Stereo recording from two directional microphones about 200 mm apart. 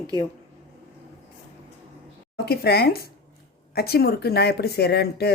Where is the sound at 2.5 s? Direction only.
50° left (ahead or behind).